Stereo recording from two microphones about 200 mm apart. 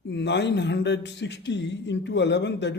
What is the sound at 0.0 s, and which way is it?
Speech, 60° left (ahead or behind).